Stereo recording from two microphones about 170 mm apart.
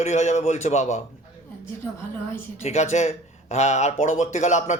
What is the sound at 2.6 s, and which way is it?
Speech, 40° left (ahead or behind).